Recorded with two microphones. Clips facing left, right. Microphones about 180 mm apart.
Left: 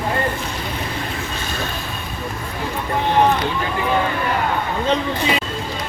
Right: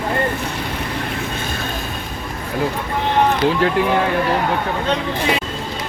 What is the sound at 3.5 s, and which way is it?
Speech, 75° right (ahead or behind).